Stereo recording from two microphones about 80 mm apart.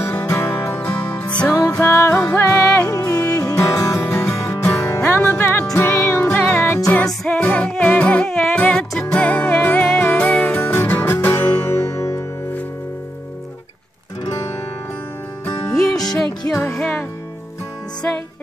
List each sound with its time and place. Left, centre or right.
0.3 s music: left
0.7 s music: centre
1.9 s music: left
7.2 s music: centre; by 12.3 s left
15.7 s music: centre